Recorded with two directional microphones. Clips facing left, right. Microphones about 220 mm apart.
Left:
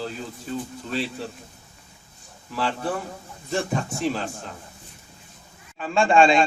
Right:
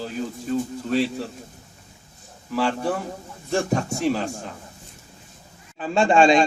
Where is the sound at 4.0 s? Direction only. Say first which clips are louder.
Right 3 dB; 5° right (ahead or behind).